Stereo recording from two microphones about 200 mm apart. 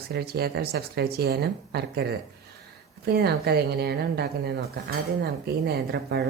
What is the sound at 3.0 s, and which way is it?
Speech, 55° right (ahead or behind).